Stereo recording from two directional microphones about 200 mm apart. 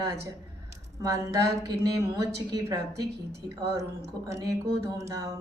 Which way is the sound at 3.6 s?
15° right (ahead or behind).